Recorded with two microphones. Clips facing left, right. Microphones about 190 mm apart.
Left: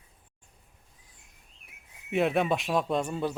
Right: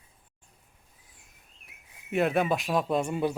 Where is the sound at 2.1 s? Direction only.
Centre (ahead or behind).